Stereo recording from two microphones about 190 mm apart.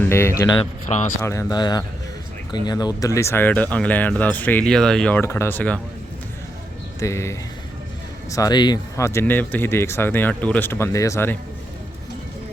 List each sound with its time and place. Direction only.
0.0 s speech: 15° left (ahead or behind)
0.6 s speech: 40° left (ahead or behind)
1.2 s speech: 15° left (ahead or behind)
7.0 s speech: 15° left (ahead or behind)